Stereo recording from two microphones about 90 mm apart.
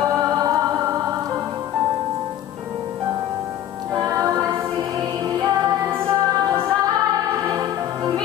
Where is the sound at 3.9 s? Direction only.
40° right (ahead or behind).